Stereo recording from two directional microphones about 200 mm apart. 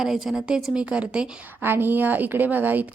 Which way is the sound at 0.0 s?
Centre (ahead or behind).